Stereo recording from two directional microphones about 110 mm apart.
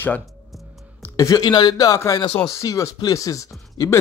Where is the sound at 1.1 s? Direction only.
30° left (ahead or behind).